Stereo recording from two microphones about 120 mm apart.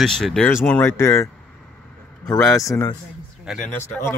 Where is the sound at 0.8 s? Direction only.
20° left (ahead or behind).